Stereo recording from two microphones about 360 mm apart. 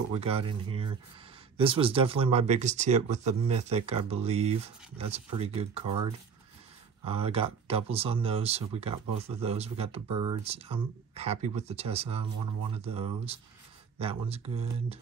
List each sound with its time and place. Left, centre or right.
0.1 s speech: centre
7.1 s speech: centre